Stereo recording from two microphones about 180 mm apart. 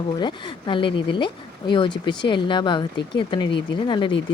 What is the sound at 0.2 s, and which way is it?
Speech, 25° left (ahead or behind).